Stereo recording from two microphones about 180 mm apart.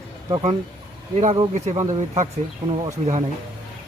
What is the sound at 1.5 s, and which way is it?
Speech, 40° right (ahead or behind).